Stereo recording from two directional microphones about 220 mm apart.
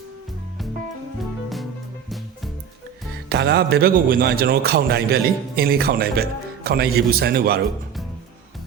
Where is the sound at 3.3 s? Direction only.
50° right (ahead or behind).